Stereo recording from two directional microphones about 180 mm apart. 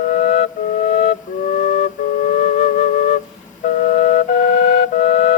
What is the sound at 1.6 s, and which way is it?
Flute, 40° left (ahead or behind).